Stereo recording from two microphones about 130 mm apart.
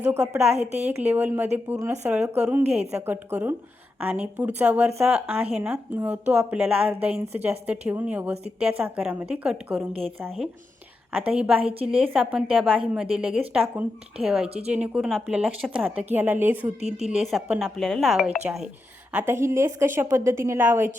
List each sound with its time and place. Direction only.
0.2 s a woman's voice: 55° right (ahead or behind)
0.9 s a woman's voice: 15° right (ahead or behind)
11.1 s a woman's voice: 10° right (ahead or behind)
19.1 s a woman's voice: 20° right (ahead or behind)